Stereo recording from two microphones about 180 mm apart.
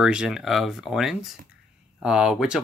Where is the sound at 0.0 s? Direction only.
5° right (ahead or behind).